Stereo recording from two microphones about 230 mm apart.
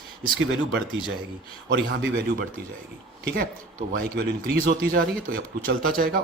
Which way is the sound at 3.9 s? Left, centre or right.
Right.